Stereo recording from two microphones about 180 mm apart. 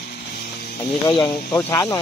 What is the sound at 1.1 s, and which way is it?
Speech, 20° left (ahead or behind).